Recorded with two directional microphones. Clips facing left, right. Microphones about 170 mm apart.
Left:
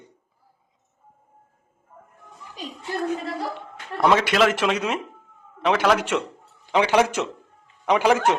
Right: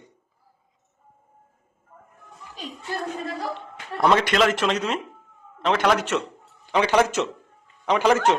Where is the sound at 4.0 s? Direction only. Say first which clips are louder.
Left 1 dB; 5° left (ahead or behind).